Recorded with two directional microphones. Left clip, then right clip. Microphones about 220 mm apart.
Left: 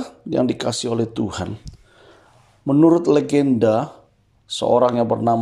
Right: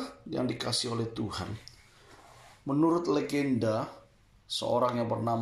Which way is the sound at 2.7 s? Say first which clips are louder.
Left 13 dB; 45° left (ahead or behind).